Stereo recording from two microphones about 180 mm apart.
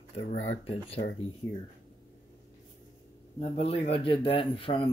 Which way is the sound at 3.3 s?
35° left (ahead or behind).